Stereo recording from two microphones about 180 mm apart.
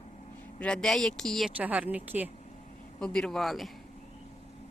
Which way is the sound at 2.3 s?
40° left (ahead or behind).